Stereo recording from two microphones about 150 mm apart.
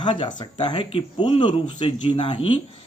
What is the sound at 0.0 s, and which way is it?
Speech, 30° left (ahead or behind).